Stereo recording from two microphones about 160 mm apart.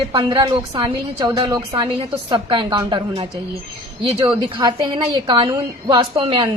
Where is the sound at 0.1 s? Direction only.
30° right (ahead or behind).